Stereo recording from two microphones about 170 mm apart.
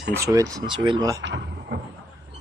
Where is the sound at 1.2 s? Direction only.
90° right.